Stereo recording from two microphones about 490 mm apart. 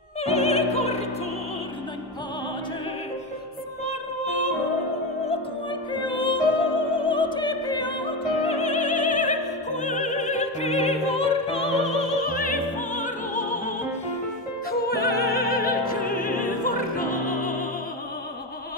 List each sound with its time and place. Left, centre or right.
0.2 s opera: centre
5.2 s music: centre